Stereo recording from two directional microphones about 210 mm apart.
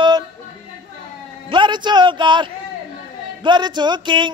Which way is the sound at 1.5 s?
20° right (ahead or behind).